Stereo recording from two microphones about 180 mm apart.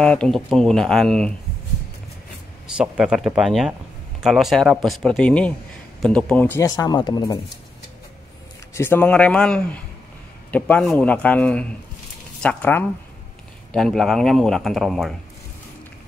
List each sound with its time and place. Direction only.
0.0 s a man's voice: 5° left (ahead or behind)
2.6 s a man's voice: 5° right (ahead or behind)
6.6 s speech: 20° left (ahead or behind)
8.7 s a man's voice: 10° left (ahead or behind)